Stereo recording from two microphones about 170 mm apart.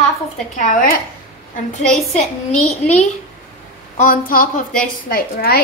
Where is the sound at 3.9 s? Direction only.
55° left (ahead or behind).